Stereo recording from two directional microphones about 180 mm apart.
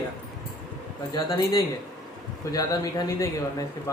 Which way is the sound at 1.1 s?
20° left (ahead or behind).